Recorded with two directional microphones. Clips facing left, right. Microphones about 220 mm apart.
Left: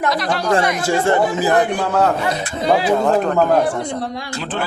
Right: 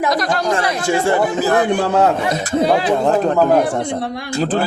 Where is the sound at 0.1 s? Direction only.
45° right (ahead or behind).